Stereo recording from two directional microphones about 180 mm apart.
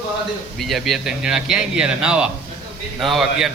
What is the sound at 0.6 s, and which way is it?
A man's voice, centre (ahead or behind).